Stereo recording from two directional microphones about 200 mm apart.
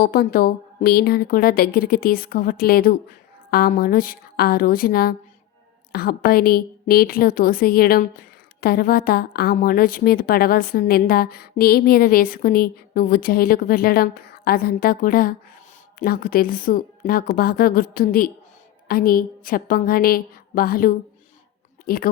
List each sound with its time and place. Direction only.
0.0 s a woman's voice: 45° left (ahead or behind)